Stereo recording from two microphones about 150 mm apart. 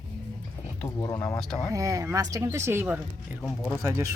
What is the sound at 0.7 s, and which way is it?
Speech, 20° left (ahead or behind).